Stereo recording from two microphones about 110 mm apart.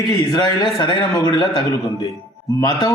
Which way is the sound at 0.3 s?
45° left (ahead or behind).